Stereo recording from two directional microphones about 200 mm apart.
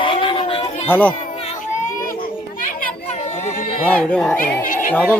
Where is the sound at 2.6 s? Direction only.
45° left (ahead or behind).